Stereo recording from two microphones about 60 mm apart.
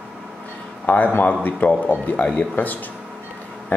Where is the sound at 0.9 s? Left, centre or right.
Left.